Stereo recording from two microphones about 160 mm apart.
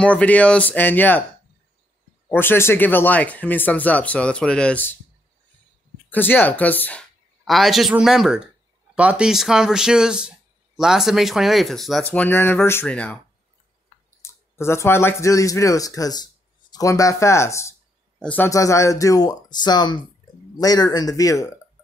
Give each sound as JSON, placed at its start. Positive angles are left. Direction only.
{"t": 0.0, "sound": "speech", "side_deg": 10}
{"t": 2.2, "sound": "speech", "side_deg": 15}
{"t": 6.0, "sound": "speech", "side_deg": 10}
{"t": 12.0, "sound": "speech", "side_deg": 10}
{"t": 14.2, "sound": "speech", "side_deg": 15}